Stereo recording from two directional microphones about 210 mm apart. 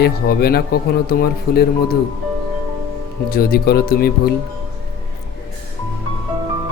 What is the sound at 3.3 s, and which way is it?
Speech, 45° left (ahead or behind).